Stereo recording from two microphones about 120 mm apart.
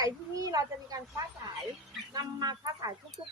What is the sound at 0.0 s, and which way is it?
A child's voice, 30° right (ahead or behind).